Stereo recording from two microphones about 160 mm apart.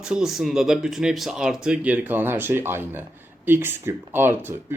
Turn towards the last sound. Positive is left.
turn(degrees=-15)  # may be behind; listen again after turning